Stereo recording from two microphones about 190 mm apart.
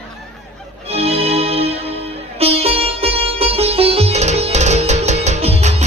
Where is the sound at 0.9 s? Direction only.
30° right (ahead or behind).